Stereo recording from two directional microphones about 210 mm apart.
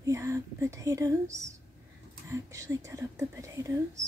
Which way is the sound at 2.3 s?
15° right (ahead or behind).